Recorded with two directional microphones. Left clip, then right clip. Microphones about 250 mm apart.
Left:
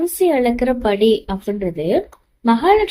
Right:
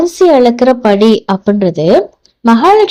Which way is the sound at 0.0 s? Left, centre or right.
Right.